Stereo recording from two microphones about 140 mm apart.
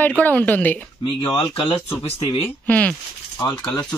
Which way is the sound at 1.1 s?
35° left (ahead or behind).